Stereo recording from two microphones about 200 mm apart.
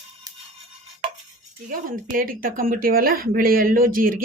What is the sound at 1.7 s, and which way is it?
Speech, 45° right (ahead or behind).